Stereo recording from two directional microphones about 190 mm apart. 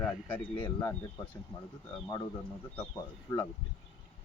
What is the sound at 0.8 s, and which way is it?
Speech, 15° left (ahead or behind).